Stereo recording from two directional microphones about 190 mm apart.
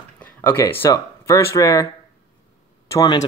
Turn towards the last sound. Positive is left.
turn(degrees=20)  # may be behind; listen again after turning